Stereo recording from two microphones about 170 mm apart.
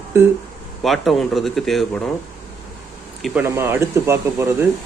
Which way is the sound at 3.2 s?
10° right (ahead or behind).